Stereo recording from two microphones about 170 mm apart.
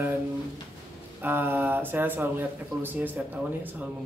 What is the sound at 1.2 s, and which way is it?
Speech, 10° right (ahead or behind).